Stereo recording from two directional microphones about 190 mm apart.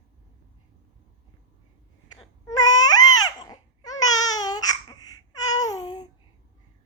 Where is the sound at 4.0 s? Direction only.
20° left (ahead or behind).